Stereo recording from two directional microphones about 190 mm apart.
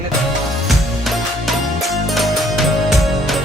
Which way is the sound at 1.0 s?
Centre (ahead or behind).